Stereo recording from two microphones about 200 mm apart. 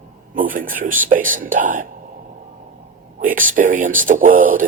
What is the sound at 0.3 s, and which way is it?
Speech, 45° right (ahead or behind).